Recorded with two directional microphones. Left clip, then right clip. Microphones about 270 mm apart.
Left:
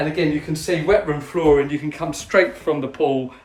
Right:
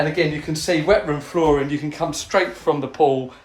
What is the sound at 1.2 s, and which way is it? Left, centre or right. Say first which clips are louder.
Speech: left 2 dB; centre.